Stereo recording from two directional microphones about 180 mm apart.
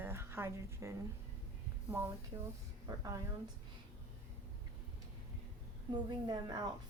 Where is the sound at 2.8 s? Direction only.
20° right (ahead or behind).